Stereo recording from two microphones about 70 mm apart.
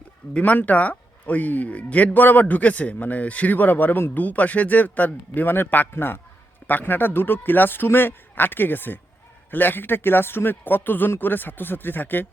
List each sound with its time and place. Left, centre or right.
0.3 s speech: left